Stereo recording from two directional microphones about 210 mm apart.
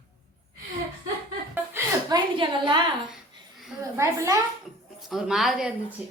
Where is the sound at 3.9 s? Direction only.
15° right (ahead or behind).